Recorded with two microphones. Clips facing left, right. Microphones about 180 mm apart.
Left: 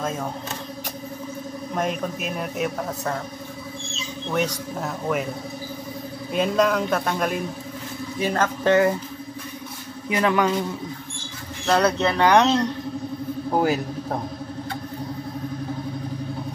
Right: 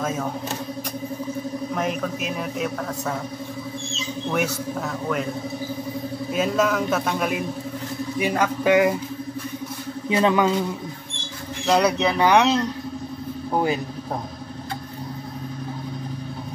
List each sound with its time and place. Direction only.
1.8 s a man's voice: centre (ahead or behind)
4.3 s a man's voice: 10° right (ahead or behind)
6.3 s a man's voice: 5° right (ahead or behind)
10.0 s speech: 25° right (ahead or behind)
11.6 s speech: 10° right (ahead or behind)
13.5 s speech: 5° left (ahead or behind)